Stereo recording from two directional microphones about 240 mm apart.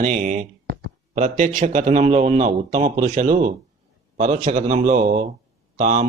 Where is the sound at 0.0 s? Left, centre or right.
Right.